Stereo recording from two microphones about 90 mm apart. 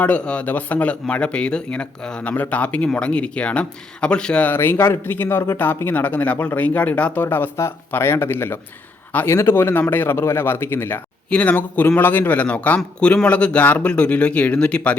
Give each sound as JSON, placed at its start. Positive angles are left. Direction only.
{"t": 0.0, "sound": "speech", "side_deg": 15}
{"t": 4.4, "sound": "speech", "side_deg": 25}